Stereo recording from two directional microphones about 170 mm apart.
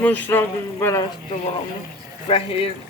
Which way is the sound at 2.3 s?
35° left (ahead or behind).